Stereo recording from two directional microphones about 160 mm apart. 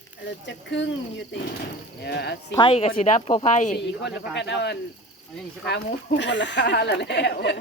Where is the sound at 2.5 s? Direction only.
30° left (ahead or behind); by 3.8 s 50° left (ahead or behind).